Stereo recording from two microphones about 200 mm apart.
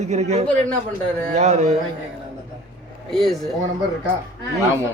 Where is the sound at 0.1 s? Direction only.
35° right (ahead or behind).